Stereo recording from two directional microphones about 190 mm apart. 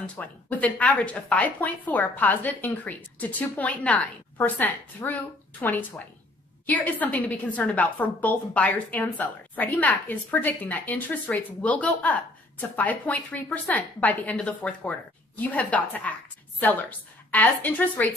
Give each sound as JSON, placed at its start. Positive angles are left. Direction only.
{"t": 0.0, "sound": "a woman's voice", "side_deg": 10}